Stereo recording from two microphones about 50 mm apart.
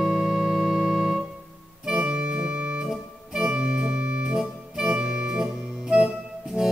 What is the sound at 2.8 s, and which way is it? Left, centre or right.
Organ, centre.